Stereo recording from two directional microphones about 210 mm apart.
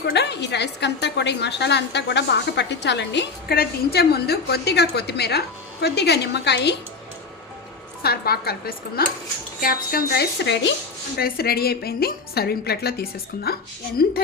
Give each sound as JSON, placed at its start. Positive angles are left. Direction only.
{"t": 0.0, "sound": "a woman's voice", "side_deg": 55}
{"t": 8.0, "sound": "a woman's voice", "side_deg": 45}